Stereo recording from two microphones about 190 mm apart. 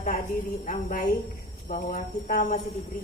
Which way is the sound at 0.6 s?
40° left (ahead or behind).